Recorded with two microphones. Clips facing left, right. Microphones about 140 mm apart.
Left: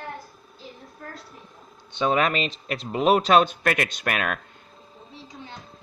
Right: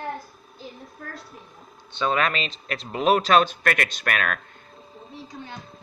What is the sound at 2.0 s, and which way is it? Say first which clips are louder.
Speech: left 2 dB; 10° left (ahead or behind).